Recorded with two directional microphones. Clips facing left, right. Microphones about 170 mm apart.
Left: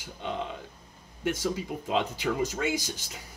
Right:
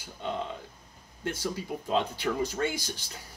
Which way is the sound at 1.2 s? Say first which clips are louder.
Left 4 dB; 15° left (ahead or behind).